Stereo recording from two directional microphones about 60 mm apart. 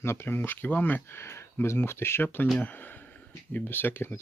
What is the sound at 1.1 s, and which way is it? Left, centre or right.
Speech, left.